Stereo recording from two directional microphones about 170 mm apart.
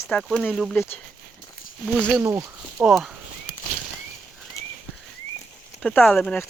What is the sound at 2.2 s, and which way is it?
Speech, 20° right (ahead or behind).